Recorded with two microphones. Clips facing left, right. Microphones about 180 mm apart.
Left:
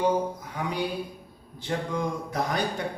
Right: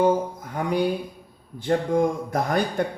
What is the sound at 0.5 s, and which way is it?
Speech, 50° right (ahead or behind).